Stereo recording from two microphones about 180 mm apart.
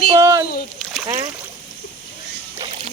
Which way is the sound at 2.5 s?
30° right (ahead or behind).